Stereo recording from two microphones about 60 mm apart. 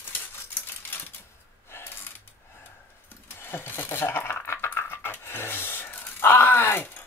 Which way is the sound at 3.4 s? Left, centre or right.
Left.